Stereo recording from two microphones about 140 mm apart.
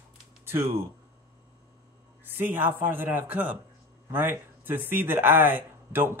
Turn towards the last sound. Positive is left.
turn(degrees=-15)  # may be behind; listen again after turning